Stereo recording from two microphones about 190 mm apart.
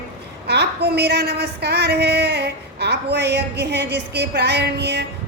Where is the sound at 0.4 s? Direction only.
60° right (ahead or behind).